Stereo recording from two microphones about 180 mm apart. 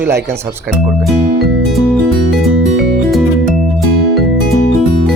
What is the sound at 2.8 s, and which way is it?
Music, centre (ahead or behind).